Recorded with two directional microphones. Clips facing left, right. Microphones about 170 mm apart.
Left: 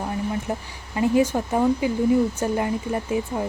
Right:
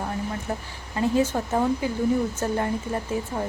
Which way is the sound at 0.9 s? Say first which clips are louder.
Left 3 dB; 15° left (ahead or behind).